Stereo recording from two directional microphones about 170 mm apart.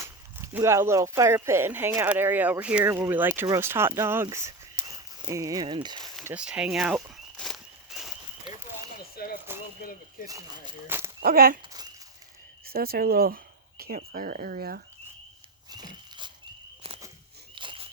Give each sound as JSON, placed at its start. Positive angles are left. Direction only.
{"t": 0.0, "sound": "speech", "side_deg": -15}
{"t": 6.0, "sound": "speech", "side_deg": 0}
{"t": 7.3, "sound": "a sound", "side_deg": 0}
{"t": 9.1, "sound": "speech", "side_deg": 60}
{"t": 10.8, "sound": "speech", "side_deg": -15}
{"t": 11.2, "sound": "speech", "side_deg": -60}
{"t": 12.6, "sound": "speech", "side_deg": -65}
{"t": 15.7, "sound": "a sound", "side_deg": -25}
{"t": 17.5, "sound": "a sound", "side_deg": -30}